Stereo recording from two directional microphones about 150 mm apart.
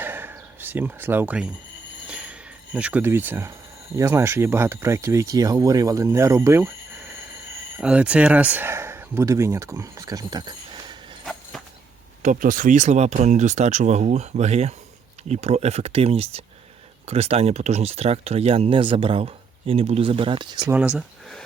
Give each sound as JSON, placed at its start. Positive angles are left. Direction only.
{"t": 0.0, "sound": "a sound", "side_deg": -15}
{"t": 2.7, "sound": "speech", "side_deg": -10}
{"t": 7.8, "sound": "speech", "side_deg": -5}
{"t": 12.2, "sound": "speech", "side_deg": -60}
{"t": 20.7, "sound": "speech", "side_deg": -10}